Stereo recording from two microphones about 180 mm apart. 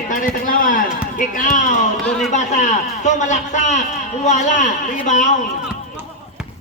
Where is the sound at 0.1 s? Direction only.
50° left (ahead or behind).